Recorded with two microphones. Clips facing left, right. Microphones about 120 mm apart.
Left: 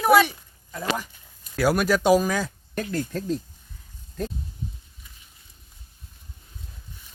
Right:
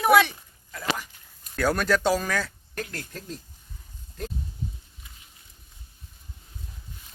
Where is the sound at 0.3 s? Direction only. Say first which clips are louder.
Left 3 dB; 20° left (ahead or behind).